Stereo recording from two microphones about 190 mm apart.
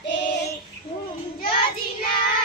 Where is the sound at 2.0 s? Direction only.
45° left (ahead or behind).